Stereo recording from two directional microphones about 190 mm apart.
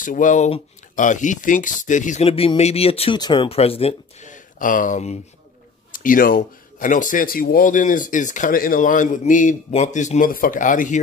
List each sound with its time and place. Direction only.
0.0 s speech: 45° left (ahead or behind)